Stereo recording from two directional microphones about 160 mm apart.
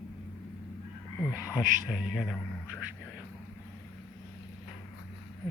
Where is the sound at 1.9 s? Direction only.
5° left (ahead or behind).